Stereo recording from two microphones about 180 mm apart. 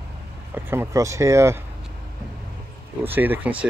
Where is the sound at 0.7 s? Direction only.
15° right (ahead or behind).